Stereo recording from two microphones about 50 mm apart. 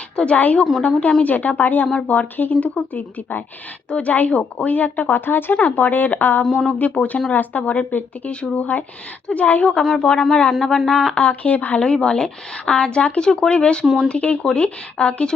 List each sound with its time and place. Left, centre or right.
0.3 s speech: left
6.4 s speech: centre
6.7 s speech: left
10.0 s speech: centre
10.5 s speech: centre
11.1 s speech: left
11.8 s speech: centre
13.8 s speech: centre
14.1 s speech: left